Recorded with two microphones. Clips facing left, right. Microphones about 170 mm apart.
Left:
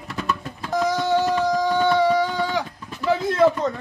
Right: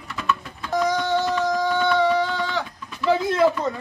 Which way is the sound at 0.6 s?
Centre (ahead or behind).